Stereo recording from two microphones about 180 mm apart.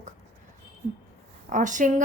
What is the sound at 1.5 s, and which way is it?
Speech, 45° right (ahead or behind).